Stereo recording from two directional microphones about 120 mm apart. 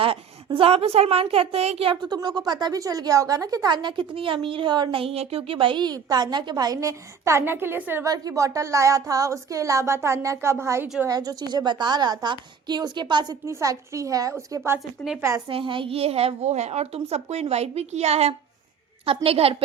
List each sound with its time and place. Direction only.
0.4 s a child's voice: 50° right (ahead or behind)
2.0 s speech: 35° right (ahead or behind); by 8.0 s 15° right (ahead or behind)
8.0 s speech: 30° right (ahead or behind)
13.4 s speech: 25° right (ahead or behind)
15.4 s a child's voice: 45° right (ahead or behind)